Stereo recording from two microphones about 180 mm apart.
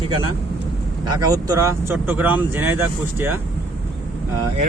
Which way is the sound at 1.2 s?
20° right (ahead or behind).